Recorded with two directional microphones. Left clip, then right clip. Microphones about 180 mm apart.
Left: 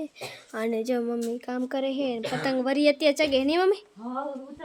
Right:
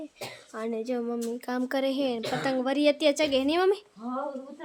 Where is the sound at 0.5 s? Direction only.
15° left (ahead or behind).